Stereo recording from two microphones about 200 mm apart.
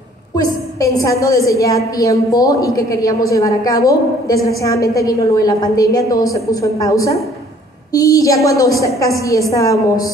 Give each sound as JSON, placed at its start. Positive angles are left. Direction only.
{"t": 0.4, "sound": "a woman's voice", "side_deg": 15}